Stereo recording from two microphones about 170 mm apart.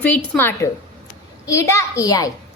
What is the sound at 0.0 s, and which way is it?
A woman's voice, 10° left (ahead or behind).